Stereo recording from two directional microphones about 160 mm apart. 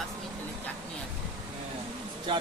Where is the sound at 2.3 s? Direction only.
30° right (ahead or behind).